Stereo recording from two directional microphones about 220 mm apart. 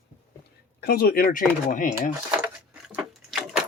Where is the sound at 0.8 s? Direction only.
45° left (ahead or behind).